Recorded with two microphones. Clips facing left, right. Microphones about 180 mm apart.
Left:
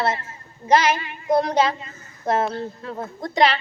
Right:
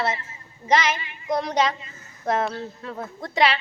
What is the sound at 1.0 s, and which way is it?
Child singing, 50° left (ahead or behind).